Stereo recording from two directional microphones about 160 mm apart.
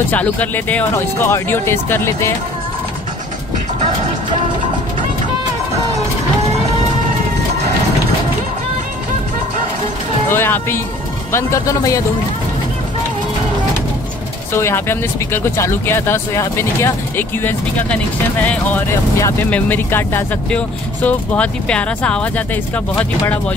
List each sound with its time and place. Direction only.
0.1 s speech: 10° left (ahead or behind)
10.3 s speech: 15° left (ahead or behind)
14.5 s speech: 15° left (ahead or behind)